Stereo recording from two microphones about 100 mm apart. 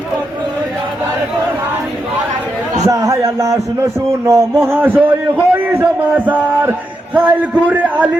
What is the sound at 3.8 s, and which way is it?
A man's voice, 30° right (ahead or behind).